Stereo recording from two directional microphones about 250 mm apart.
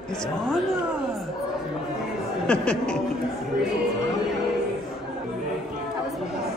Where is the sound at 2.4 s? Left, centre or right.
Centre.